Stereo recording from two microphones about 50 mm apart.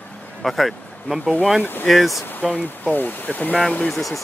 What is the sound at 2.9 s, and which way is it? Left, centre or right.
Speech, left.